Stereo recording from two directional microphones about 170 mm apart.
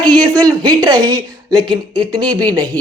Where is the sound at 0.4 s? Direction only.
25° right (ahead or behind).